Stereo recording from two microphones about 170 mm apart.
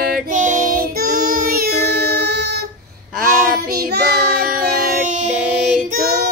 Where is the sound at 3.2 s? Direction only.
55° right (ahead or behind).